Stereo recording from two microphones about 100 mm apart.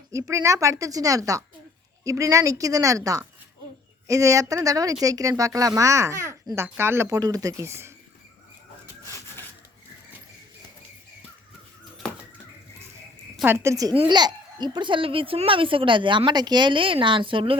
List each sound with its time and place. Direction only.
0.1 s speech: 30° right (ahead or behind)
7.2 s speech: 40° right (ahead or behind)
13.6 s speech: 35° right (ahead or behind)
14.1 s speech: 45° right (ahead or behind); by 17.6 s 65° right (ahead or behind)